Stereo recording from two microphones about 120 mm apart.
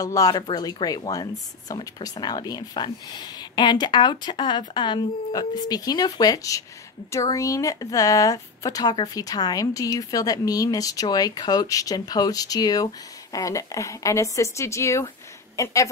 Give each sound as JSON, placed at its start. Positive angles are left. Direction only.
{"t": 0.0, "sound": "speech", "side_deg": 30}